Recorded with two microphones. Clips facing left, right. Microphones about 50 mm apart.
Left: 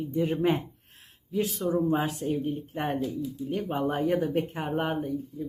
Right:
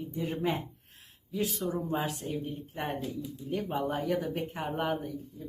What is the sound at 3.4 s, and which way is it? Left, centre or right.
Speech, left.